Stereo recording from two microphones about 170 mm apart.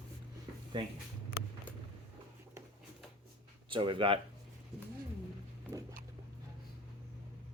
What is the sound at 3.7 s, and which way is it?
Speech, 30° right (ahead or behind).